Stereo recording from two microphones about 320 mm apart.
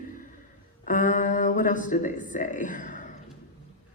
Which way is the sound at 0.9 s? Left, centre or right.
Left.